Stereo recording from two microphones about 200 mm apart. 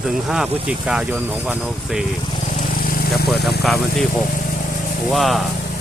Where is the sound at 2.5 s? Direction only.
45° left (ahead or behind).